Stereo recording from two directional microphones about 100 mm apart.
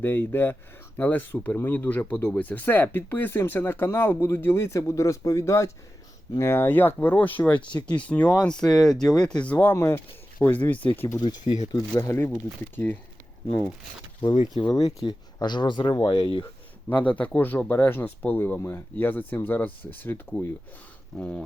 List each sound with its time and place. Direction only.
0.0 s speech: 20° left (ahead or behind)
11.5 s speech: 35° left (ahead or behind)
12.7 s speech: 20° left (ahead or behind)
14.2 s speech: 55° left (ahead or behind)
16.9 s speech: 15° left (ahead or behind)